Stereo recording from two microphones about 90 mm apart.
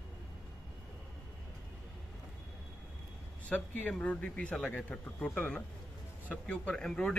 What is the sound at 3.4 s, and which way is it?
A man's voice, 15° left (ahead or behind).